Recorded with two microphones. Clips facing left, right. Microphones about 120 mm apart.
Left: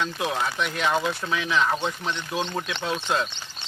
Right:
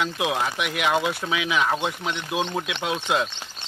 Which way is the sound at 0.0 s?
10° right (ahead or behind).